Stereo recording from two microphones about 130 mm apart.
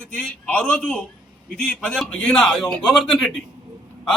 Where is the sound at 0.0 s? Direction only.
10° left (ahead or behind).